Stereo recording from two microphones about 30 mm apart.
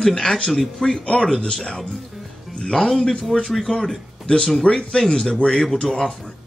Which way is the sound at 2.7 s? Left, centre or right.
Centre.